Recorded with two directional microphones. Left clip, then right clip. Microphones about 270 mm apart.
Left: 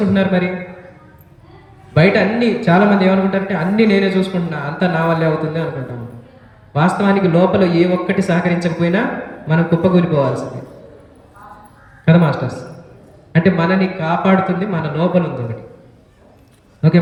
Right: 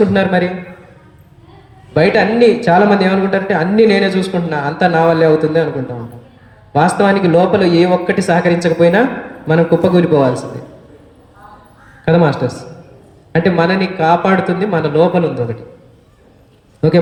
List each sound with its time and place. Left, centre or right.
0.1 s speech: centre
1.9 s speech: centre
6.7 s speech: centre
12.0 s speech: centre
16.8 s speech: centre